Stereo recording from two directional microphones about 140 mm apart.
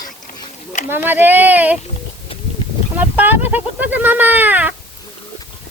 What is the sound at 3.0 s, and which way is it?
Speech, 15° right (ahead or behind).